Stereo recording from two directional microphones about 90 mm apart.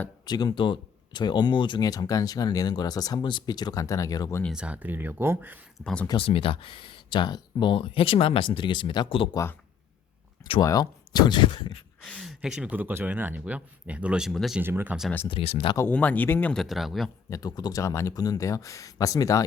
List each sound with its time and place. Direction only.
0.3 s speech: 50° left (ahead or behind)
1.8 s speech: 40° left (ahead or behind)
4.5 s speech: 15° right (ahead or behind)
5.8 s speech: 10° left (ahead or behind)
6.1 s speech: 80° left
10.6 s speech: 45° left (ahead or behind); by 11.7 s 60° left (ahead or behind)
12.2 s speech: 10° right (ahead or behind)
14.3 s speech: centre (ahead or behind)
14.6 s speech: 25° right (ahead or behind)
15.3 s speech: 70° left (ahead or behind)
15.9 s speech: 15° left (ahead or behind)
16.6 s speech: centre (ahead or behind)
17.2 s speech: 45° left (ahead or behind)